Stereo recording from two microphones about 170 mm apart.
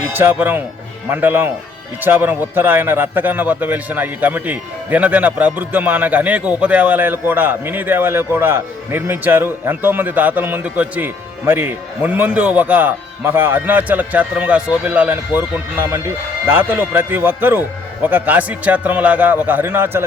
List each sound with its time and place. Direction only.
0.1 s a man's voice: 10° right (ahead or behind)